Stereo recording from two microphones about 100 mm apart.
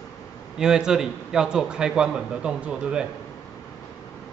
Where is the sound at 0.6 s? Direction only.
5° right (ahead or behind).